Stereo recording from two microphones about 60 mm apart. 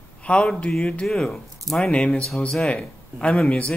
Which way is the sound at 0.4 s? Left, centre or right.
Centre.